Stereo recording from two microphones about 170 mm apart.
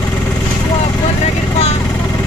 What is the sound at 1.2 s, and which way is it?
Vehicle, 40° left (ahead or behind).